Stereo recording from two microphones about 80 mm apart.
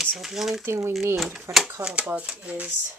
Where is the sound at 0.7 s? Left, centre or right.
Right.